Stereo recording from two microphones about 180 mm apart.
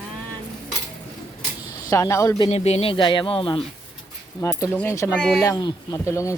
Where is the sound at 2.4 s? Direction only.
35° left (ahead or behind).